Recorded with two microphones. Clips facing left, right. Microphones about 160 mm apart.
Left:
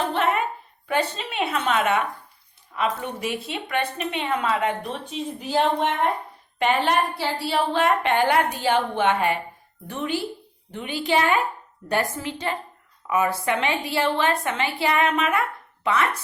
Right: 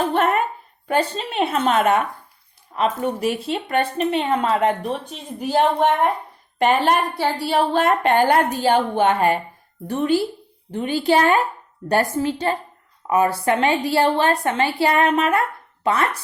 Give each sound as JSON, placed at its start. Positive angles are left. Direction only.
{"t": 0.1, "sound": "a sound", "side_deg": -50}
{"t": 0.9, "sound": "a woman's voice", "side_deg": -40}
{"t": 5.1, "sound": "a woman's voice", "side_deg": -50}